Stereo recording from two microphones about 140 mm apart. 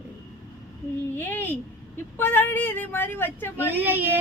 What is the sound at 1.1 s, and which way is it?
Speech, 15° left (ahead or behind).